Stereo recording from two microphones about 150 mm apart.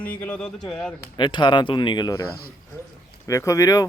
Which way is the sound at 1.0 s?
30° left (ahead or behind).